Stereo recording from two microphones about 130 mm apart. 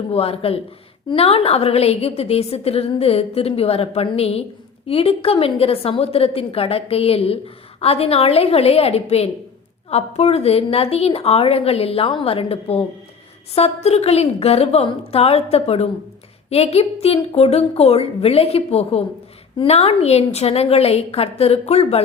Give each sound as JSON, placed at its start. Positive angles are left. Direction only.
{"t": 0.1, "sound": "a woman's voice", "side_deg": 50}